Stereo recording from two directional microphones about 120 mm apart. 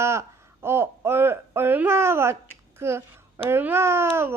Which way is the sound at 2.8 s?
20° right (ahead or behind).